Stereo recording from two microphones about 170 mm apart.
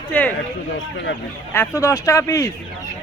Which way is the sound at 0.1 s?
10° left (ahead or behind).